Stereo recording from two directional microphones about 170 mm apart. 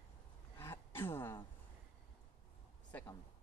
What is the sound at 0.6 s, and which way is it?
Speech, 15° left (ahead or behind).